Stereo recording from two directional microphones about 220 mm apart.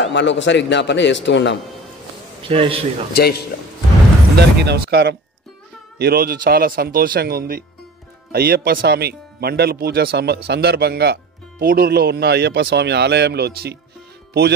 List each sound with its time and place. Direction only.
0.0 s a man's voice: 55° left (ahead or behind)
2.4 s a man's voice: 25° right (ahead or behind)
3.1 s a man's voice: 45° left (ahead or behind)
4.4 s speech: 50° right (ahead or behind)